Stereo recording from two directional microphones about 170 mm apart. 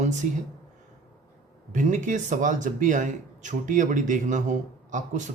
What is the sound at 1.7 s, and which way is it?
Speech, 45° right (ahead or behind).